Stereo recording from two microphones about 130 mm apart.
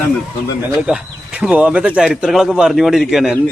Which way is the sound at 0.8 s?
10° right (ahead or behind).